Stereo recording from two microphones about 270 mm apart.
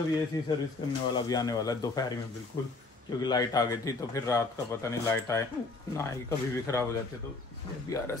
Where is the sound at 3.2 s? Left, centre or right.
Centre.